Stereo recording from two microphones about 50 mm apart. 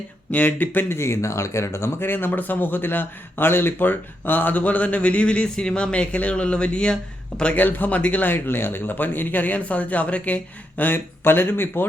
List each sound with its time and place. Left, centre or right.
0.3 s speech: left
0.9 s speech: left
2.0 s a man's voice: left; by 7.5 s centre
7.5 s speech: left